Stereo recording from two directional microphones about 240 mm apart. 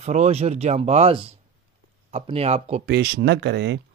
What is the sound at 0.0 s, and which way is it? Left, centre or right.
Speech, right.